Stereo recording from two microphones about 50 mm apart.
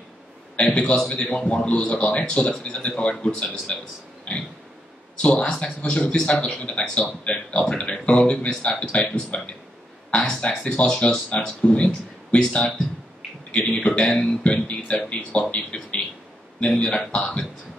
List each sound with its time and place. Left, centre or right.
0.6 s speech: centre
4.3 s a sound: left
5.2 s speech: centre